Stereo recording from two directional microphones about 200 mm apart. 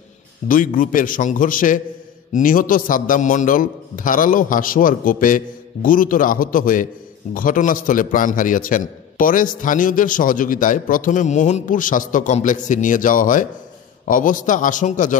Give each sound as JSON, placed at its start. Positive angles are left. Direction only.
{"t": 0.5, "sound": "a man's voice", "side_deg": 45}